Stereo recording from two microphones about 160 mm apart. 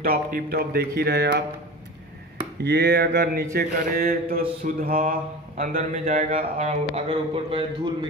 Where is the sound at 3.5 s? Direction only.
70° right (ahead or behind).